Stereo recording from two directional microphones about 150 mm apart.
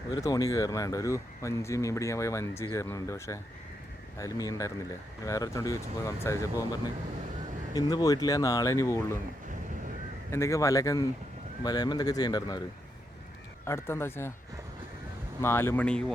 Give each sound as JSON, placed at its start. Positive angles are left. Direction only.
{"t": 0.1, "sound": "speech", "side_deg": 25}
{"t": 10.3, "sound": "speech", "side_deg": 20}
{"t": 13.7, "sound": "speech", "side_deg": 15}
{"t": 15.4, "sound": "speech", "side_deg": 15}